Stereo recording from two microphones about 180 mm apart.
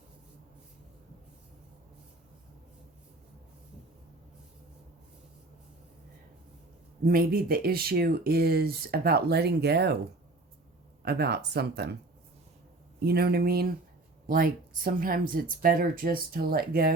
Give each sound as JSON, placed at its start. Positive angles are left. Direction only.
{"t": 7.0, "sound": "speech", "side_deg": -55}
{"t": 11.0, "sound": "speech", "side_deg": -65}
{"t": 13.1, "sound": "speech", "side_deg": -60}